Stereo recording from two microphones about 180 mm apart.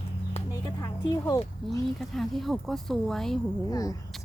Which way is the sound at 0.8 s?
20° left (ahead or behind).